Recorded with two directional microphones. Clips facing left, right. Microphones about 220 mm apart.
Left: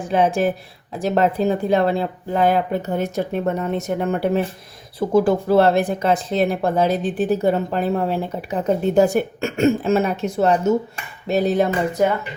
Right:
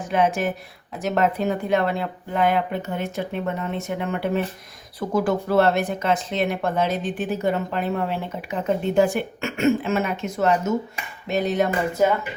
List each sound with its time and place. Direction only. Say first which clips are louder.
0.1 s speech: left 4 dB; 30° left (ahead or behind)